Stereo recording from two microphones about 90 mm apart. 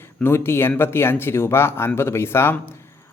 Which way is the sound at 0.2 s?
25° left (ahead or behind).